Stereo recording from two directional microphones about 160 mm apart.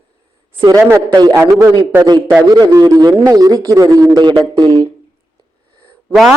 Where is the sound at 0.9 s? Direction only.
20° right (ahead or behind).